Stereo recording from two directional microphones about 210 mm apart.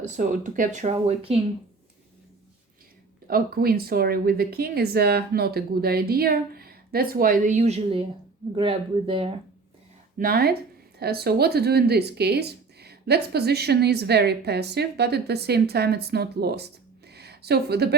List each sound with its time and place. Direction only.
0.0 s speech: 35° right (ahead or behind)
3.2 s speech: 45° right (ahead or behind); by 9.3 s 25° right (ahead or behind)
10.2 s speech: 45° right (ahead or behind)